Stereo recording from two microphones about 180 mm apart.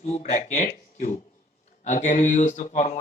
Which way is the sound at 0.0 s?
40° left (ahead or behind).